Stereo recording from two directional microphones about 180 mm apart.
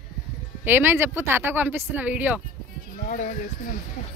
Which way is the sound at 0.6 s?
10° right (ahead or behind).